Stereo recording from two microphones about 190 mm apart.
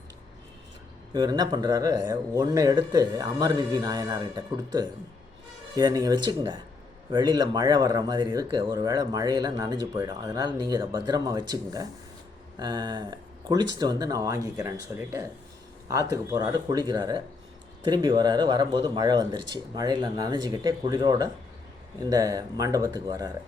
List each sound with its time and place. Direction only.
1.1 s speech: 20° right (ahead or behind)